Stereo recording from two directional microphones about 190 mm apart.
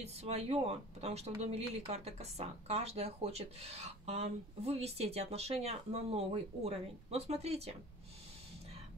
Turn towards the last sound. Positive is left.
turn(degrees=-35)  # may be behind; listen again after turning